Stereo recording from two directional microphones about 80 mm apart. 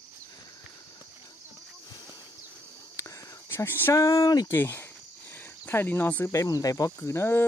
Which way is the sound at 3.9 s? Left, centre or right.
Left.